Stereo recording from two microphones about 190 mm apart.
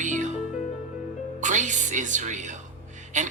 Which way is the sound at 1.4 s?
40° right (ahead or behind).